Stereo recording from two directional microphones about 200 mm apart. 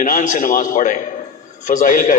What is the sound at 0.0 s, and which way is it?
A man's voice, 40° left (ahead or behind).